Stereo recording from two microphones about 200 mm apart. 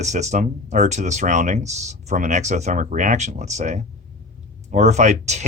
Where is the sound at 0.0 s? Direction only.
35° right (ahead or behind).